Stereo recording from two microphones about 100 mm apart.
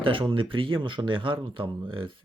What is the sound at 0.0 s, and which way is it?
Speech, 60° right (ahead or behind).